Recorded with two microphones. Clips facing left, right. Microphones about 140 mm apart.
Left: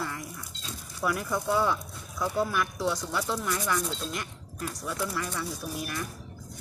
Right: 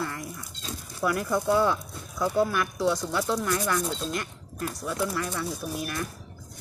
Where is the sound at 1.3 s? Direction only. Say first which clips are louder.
Right 4 dB; 10° right (ahead or behind).